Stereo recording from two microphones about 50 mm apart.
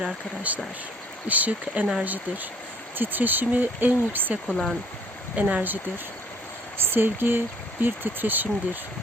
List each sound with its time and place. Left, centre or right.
0.5 s speech: right
4.4 s speech: centre
5.4 s speech: right
6.8 s speech: right